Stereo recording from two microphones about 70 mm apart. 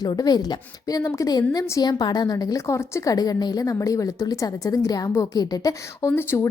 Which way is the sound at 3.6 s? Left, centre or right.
Left.